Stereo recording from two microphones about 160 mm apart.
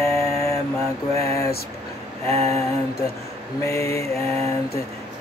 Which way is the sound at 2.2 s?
15° left (ahead or behind).